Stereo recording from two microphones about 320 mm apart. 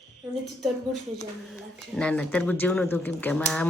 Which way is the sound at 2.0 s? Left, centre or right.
Centre.